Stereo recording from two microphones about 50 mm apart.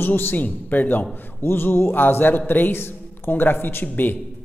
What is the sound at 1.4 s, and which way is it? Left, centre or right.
A man's voice, left.